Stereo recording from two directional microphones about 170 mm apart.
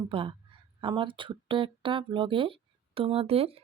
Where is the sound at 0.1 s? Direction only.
30° right (ahead or behind).